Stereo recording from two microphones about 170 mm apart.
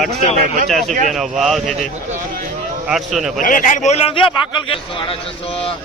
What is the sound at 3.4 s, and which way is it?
A man's voice, 50° left (ahead or behind).